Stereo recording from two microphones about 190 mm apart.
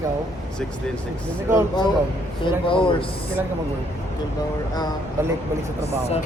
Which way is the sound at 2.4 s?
25° left (ahead or behind).